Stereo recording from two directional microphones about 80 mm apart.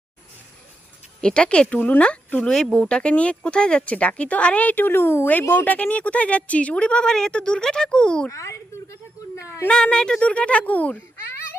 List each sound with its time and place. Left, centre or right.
1.2 s speech: centre
8.3 s a sound: left
9.6 s speech: centre